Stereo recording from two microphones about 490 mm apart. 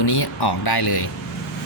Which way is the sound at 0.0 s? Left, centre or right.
Left.